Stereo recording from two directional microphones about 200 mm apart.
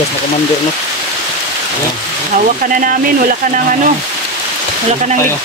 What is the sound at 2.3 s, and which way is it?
Speech, 40° right (ahead or behind).